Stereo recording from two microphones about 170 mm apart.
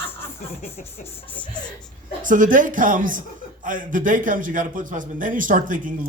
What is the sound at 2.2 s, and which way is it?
Speech, 50° right (ahead or behind).